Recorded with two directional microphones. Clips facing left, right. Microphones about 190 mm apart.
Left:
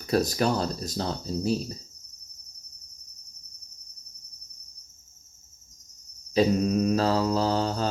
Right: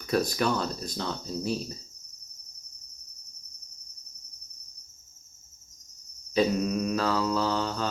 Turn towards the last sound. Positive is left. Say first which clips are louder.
# left 3 dB
turn(degrees=35)  # may be behind; listen again after turning